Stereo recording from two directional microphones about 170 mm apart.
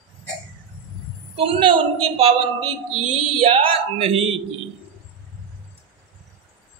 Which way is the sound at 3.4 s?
35° right (ahead or behind).